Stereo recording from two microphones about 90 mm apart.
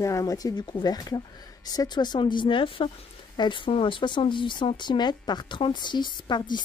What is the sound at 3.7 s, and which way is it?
Speech, 75° left (ahead or behind).